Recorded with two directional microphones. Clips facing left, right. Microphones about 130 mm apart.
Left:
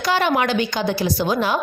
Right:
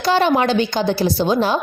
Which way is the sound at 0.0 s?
30° right (ahead or behind).